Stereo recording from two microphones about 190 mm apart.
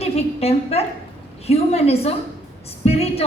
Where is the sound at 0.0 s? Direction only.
35° left (ahead or behind).